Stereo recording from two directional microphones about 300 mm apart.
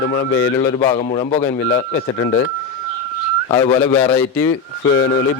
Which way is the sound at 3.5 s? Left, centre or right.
Centre.